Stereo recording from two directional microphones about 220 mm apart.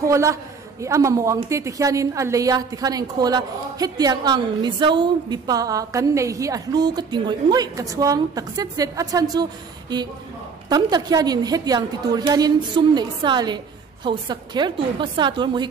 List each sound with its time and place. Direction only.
0.0 s a man's voice: 15° right (ahead or behind)